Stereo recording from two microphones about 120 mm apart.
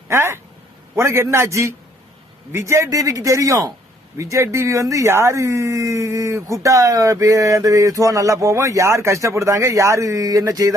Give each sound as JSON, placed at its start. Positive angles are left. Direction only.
{"t": 0.1, "sound": "speech", "side_deg": -20}